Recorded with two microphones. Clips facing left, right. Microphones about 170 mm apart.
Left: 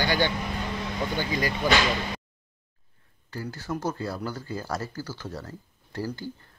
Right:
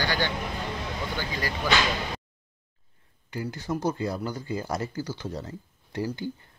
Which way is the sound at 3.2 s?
15° right (ahead or behind).